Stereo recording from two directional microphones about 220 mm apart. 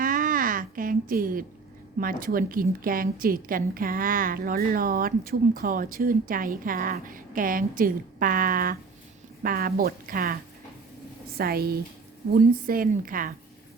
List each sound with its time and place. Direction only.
0.0 s a sound: 40° right (ahead or behind)
2.0 s a woman's voice: 40° right (ahead or behind)
11.3 s a woman's voice: 45° right (ahead or behind)